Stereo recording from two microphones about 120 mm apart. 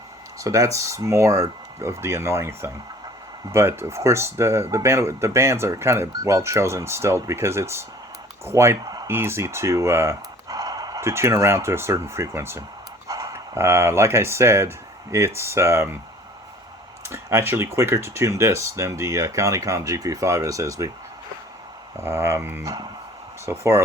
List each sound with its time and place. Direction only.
0.3 s speech: 25° right (ahead or behind)
17.1 s speech: 20° right (ahead or behind)
22.0 s speech: 20° right (ahead or behind)